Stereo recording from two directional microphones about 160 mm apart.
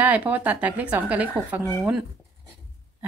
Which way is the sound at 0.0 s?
10° right (ahead or behind).